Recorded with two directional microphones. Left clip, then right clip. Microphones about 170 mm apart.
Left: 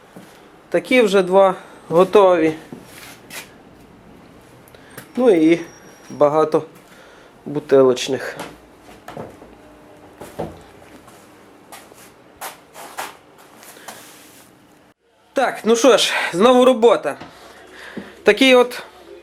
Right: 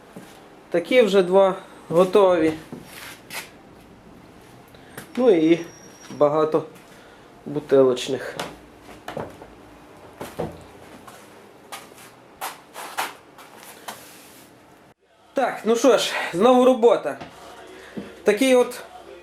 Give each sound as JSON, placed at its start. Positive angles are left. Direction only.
{"t": 0.7, "sound": "speech", "side_deg": 20}
{"t": 5.2, "sound": "speech", "side_deg": 20}
{"t": 15.4, "sound": "speech", "side_deg": 20}
{"t": 18.2, "sound": "speech", "side_deg": 25}